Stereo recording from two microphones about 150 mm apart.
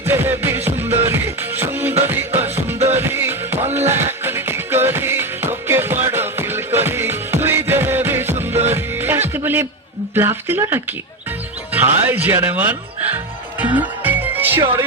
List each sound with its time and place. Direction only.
0.0 s music: 15° right (ahead or behind)
10.2 s speech: 15° right (ahead or behind)
13.6 s music: 10° right (ahead or behind)